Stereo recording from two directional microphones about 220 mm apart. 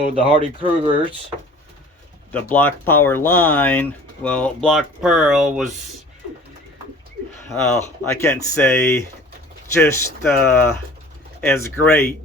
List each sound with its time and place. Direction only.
0.1 s speech: 25° right (ahead or behind)
2.3 s speech: 10° left (ahead or behind)
7.4 s speech: 10° left (ahead or behind)